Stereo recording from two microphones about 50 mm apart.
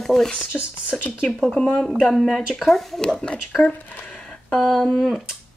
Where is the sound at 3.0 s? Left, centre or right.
Centre.